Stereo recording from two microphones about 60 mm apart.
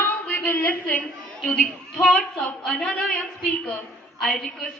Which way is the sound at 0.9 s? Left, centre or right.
Centre.